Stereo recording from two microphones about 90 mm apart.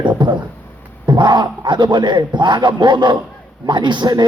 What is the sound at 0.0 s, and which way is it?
Music, 60° right (ahead or behind).